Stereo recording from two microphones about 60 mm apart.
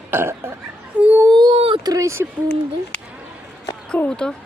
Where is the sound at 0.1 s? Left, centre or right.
Right.